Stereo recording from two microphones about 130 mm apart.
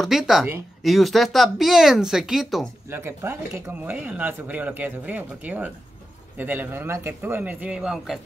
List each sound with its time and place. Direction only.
0.0 s speech: 5° right (ahead or behind)
2.9 s speech: 15° right (ahead or behind)